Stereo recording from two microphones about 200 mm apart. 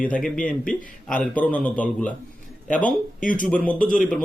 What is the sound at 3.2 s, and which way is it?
Speech, 40° left (ahead or behind).